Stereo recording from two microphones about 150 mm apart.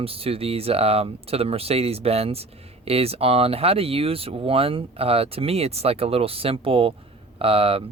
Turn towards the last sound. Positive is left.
turn(degrees=-40)  # may be behind; listen again after turning